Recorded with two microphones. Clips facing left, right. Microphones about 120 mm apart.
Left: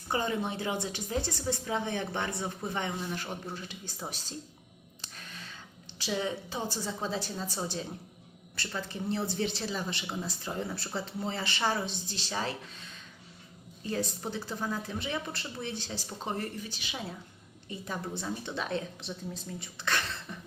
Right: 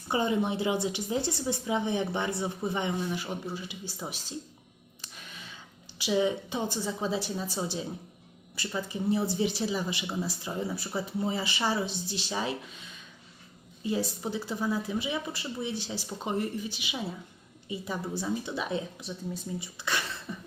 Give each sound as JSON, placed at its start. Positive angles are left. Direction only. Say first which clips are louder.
{"t": 0.1, "sound": "speech", "louder": "right 4 dB", "side_deg": -15}
{"t": 6.0, "sound": "speech", "louder": "right 6 dB", "side_deg": -10}
{"t": 13.8, "sound": "speech", "louder": "right 3 dB", "side_deg": -10}